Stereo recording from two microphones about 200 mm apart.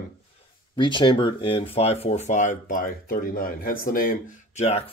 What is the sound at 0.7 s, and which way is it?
Speech, 25° left (ahead or behind).